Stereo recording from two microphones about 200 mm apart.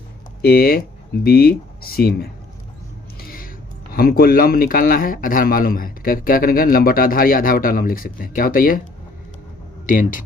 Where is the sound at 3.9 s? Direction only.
50° left (ahead or behind).